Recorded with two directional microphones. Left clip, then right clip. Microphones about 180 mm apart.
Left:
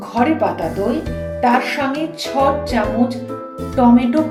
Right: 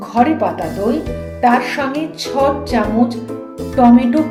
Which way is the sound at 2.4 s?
25° right (ahead or behind).